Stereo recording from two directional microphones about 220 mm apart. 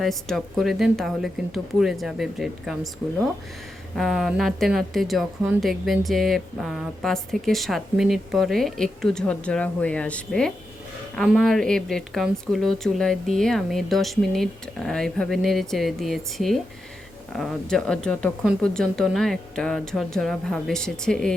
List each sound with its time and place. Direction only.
0.0 s speech: centre (ahead or behind)